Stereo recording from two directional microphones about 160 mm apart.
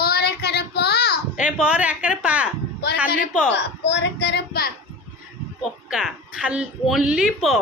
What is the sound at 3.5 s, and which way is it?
A child's voice, 90° left.